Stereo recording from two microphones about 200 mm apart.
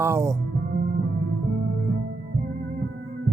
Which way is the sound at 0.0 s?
15° right (ahead or behind).